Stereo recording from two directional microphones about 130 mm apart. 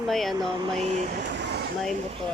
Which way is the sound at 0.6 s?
55° right (ahead or behind).